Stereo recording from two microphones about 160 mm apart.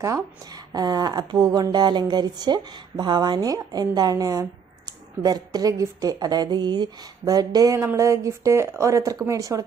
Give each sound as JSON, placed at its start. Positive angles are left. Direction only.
{"t": 0.0, "sound": "speech", "side_deg": -20}